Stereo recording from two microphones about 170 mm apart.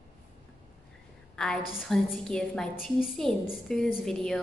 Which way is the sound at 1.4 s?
Centre (ahead or behind).